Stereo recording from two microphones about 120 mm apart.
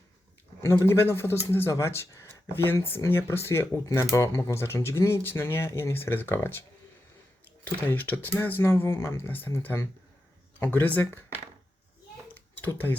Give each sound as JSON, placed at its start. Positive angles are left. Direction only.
{"t": 0.9, "sound": "speech", "side_deg": 20}
{"t": 7.6, "sound": "speech", "side_deg": 15}
{"t": 12.3, "sound": "a sound", "side_deg": 15}